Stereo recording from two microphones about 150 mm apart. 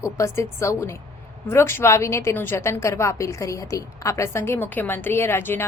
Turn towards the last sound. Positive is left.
turn(degrees=15)  # may be behind; listen again after turning